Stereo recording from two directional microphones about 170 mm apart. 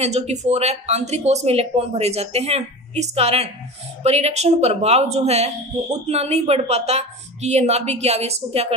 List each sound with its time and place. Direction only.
0.0 s speech: 40° right (ahead or behind)